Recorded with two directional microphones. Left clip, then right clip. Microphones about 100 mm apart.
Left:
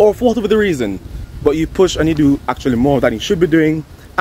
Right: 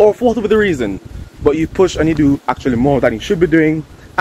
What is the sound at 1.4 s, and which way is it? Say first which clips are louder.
Speech: even; 25° left (ahead or behind).